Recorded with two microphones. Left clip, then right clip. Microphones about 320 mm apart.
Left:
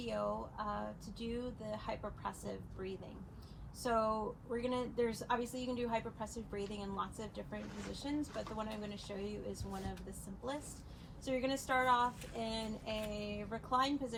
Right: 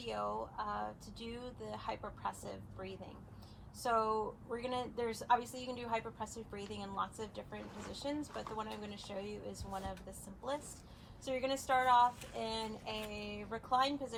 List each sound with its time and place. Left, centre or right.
0.0 s a woman's voice: centre
11.3 s a woman's voice: centre